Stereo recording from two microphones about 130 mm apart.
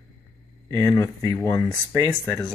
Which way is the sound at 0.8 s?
20° left (ahead or behind).